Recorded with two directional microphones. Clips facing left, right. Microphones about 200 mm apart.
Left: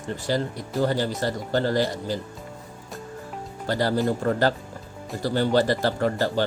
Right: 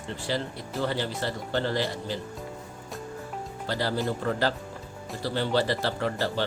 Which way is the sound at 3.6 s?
45° left (ahead or behind).